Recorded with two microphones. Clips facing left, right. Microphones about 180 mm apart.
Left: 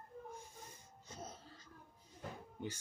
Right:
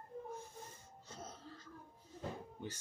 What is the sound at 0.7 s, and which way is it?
Wheeze, 10° left (ahead or behind).